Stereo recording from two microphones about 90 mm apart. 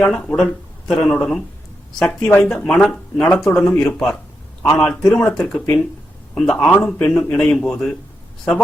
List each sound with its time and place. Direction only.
0.0 s a man's voice: 15° left (ahead or behind)